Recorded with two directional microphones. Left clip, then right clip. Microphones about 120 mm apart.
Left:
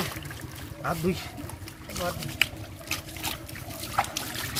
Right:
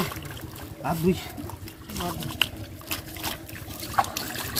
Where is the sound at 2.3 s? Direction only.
25° right (ahead or behind).